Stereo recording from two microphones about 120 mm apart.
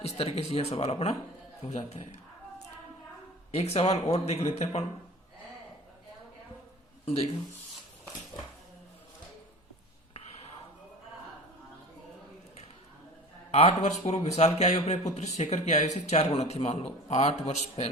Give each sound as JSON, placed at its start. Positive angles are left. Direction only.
{"t": 0.0, "sound": "speech", "side_deg": 55}
{"t": 3.5, "sound": "speech", "side_deg": 60}
{"t": 7.0, "sound": "speech", "side_deg": 55}
{"t": 13.5, "sound": "speech", "side_deg": 60}